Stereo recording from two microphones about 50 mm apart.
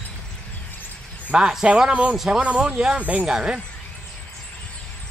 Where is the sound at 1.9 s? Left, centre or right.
Right.